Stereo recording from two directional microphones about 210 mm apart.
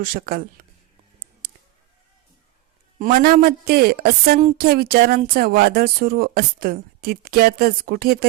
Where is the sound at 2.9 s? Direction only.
40° right (ahead or behind).